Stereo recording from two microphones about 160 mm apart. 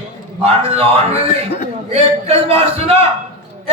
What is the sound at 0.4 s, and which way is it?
Speech, 40° right (ahead or behind).